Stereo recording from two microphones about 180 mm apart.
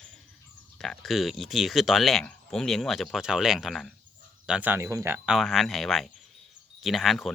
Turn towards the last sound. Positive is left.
turn(degrees=0)  # may be behind; listen again after turning